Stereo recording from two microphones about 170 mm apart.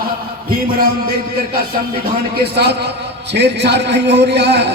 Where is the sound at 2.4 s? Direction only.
75° right (ahead or behind).